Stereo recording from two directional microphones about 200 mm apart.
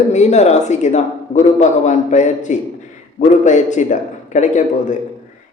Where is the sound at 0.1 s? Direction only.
35° left (ahead or behind).